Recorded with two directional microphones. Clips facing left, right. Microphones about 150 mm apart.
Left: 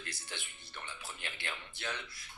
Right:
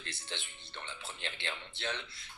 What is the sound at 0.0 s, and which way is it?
Speech, 25° right (ahead or behind).